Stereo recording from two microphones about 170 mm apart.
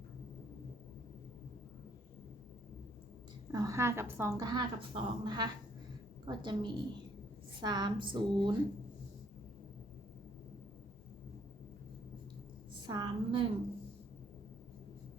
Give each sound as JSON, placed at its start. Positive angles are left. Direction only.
{"t": 3.5, "sound": "speech", "side_deg": -20}
{"t": 12.8, "sound": "a woman's voice", "side_deg": -25}